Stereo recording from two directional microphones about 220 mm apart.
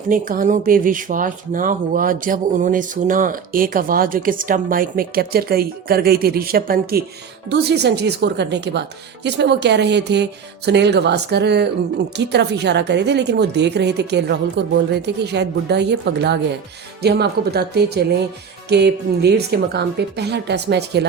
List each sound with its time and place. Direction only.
0.1 s a woman's voice: 40° right (ahead or behind)